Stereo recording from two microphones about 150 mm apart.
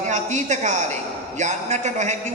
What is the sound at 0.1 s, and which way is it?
A woman's voice, 50° right (ahead or behind).